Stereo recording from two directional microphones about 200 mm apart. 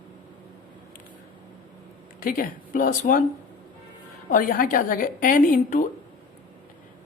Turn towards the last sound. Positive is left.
turn(degrees=40)  # may be behind; listen again after turning